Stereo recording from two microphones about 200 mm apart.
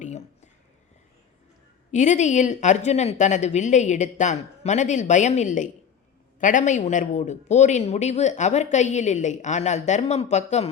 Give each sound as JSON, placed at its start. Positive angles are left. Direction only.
{"t": 1.9, "sound": "a man's voice", "side_deg": 35}